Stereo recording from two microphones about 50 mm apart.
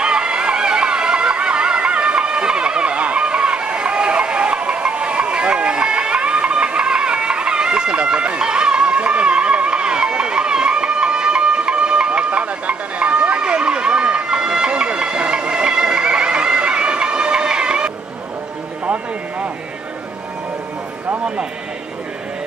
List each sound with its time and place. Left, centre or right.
0.0 s music: centre